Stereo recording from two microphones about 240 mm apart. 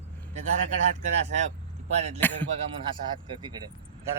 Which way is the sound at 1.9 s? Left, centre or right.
Right.